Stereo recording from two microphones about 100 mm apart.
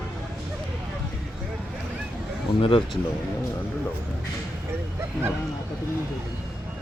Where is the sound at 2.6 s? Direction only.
60° left (ahead or behind).